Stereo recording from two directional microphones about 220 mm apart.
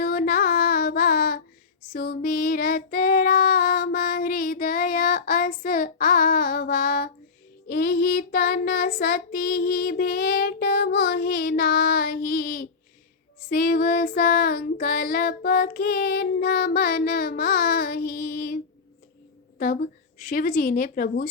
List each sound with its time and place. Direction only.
0.0 s music: 45° left (ahead or behind)
1.9 s child singing: 45° left (ahead or behind)
19.5 s a woman's voice: 40° left (ahead or behind)